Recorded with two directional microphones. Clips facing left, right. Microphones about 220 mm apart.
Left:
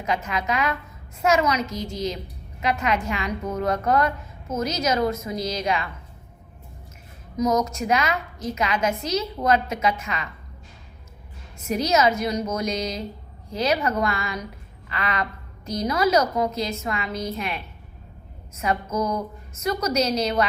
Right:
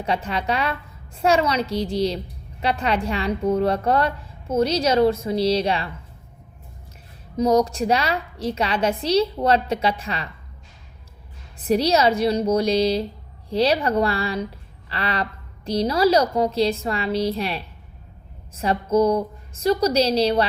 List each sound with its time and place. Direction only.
0.0 s a woman's voice: 30° right (ahead or behind)
7.3 s a woman's voice: 30° right (ahead or behind)
11.5 s a woman's voice: 35° right (ahead or behind)